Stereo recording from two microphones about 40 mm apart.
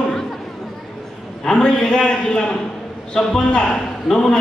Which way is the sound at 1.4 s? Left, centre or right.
Centre.